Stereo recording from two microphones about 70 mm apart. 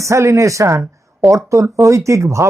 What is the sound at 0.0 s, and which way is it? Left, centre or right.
Speech, right.